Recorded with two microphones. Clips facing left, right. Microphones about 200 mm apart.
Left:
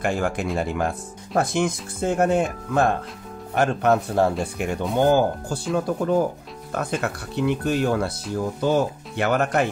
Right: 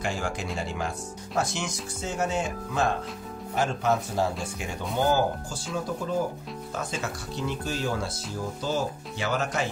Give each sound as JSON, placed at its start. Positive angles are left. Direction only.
{"t": 0.0, "sound": "speech", "side_deg": 55}